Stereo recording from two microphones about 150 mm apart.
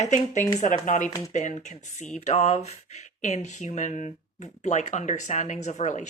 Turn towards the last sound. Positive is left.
turn(degrees=50)  # may be behind; listen again after turning